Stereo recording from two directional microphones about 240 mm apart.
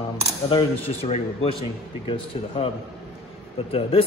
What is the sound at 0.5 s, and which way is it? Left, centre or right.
Speech, left.